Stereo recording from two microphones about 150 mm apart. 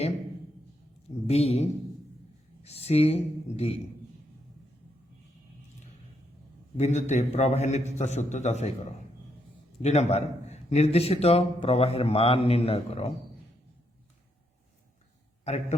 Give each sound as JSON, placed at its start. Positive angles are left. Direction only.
{"t": 1.3, "sound": "a man's voice", "side_deg": 45}
{"t": 2.6, "sound": "a man's voice", "side_deg": 45}
{"t": 6.7, "sound": "a man's voice", "side_deg": 50}
{"t": 15.5, "sound": "a man's voice", "side_deg": 45}